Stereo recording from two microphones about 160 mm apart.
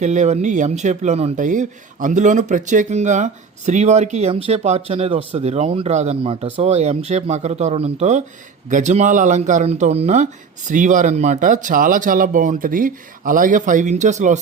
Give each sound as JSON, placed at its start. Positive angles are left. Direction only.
{"t": 0.0, "sound": "speech", "side_deg": -45}